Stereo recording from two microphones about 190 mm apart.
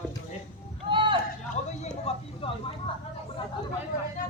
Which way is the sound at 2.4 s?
30° left (ahead or behind).